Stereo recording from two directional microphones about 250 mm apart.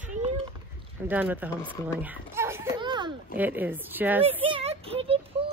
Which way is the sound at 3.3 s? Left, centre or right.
Centre.